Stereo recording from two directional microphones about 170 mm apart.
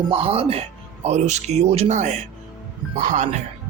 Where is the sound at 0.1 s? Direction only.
35° right (ahead or behind).